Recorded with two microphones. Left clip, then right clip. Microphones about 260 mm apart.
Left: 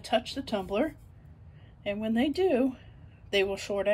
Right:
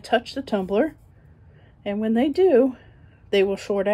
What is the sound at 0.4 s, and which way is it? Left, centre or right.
A woman's voice, centre.